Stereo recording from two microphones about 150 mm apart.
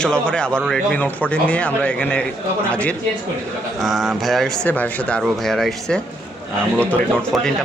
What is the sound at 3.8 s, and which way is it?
Speech, centre (ahead or behind).